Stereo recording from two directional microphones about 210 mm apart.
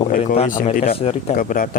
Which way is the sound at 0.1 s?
35° left (ahead or behind).